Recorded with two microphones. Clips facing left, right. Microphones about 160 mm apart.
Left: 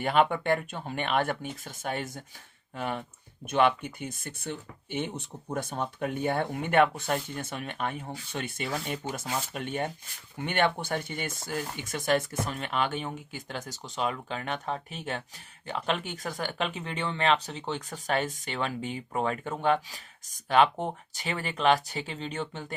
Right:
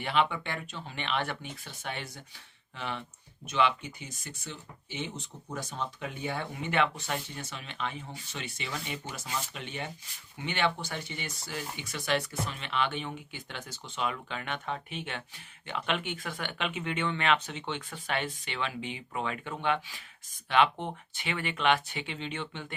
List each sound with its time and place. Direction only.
0.0 s speech: 45° left (ahead or behind)